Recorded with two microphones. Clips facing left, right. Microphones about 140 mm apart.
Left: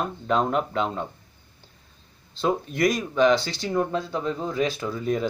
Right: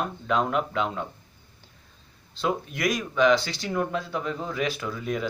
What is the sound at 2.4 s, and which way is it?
Speech, 35° left (ahead or behind).